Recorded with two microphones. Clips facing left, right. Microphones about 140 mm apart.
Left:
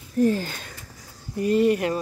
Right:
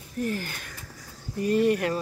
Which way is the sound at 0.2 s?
25° left (ahead or behind).